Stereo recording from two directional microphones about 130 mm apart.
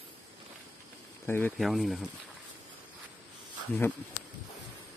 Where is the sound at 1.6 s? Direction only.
Centre (ahead or behind).